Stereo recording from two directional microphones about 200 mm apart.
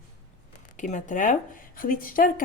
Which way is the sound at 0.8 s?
40° left (ahead or behind).